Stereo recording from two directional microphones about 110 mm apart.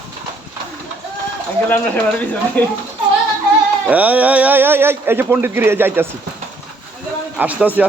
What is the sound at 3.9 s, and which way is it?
Speech, 15° right (ahead or behind).